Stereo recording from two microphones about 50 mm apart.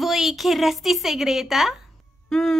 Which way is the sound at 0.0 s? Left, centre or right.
Centre.